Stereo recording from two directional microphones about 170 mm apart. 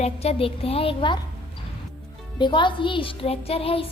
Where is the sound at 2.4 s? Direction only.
25° left (ahead or behind).